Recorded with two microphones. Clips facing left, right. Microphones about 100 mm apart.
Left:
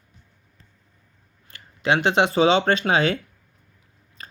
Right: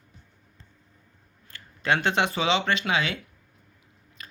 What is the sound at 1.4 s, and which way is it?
Speech, 25° left (ahead or behind).